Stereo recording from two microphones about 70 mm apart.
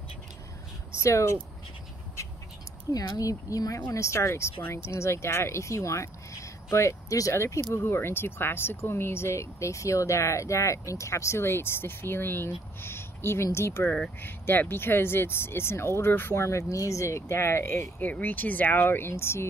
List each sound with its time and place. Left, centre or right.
0.9 s speech: left
2.9 s speech: left
14.2 s speech: left
18.0 s speech: left